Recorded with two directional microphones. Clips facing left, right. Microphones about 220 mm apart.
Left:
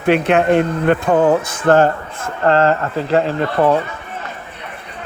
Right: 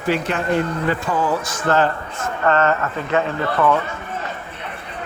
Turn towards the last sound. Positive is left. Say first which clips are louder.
# left 4 dB
turn(degrees=30)  # may be behind; listen again after turning